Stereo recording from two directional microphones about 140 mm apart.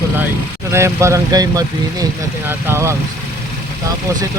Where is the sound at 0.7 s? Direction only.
20° right (ahead or behind).